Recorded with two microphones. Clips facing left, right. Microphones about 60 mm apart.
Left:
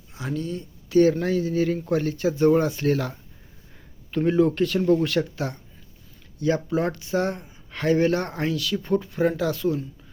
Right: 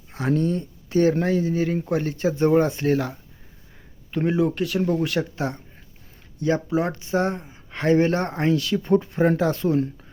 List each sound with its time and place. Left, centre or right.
0.1 s speech: right
0.9 s speech: right
4.3 s speech: centre; by 9.8 s right